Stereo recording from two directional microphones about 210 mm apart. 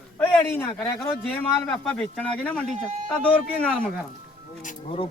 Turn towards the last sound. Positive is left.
turn(degrees=40)  # may be behind; listen again after turning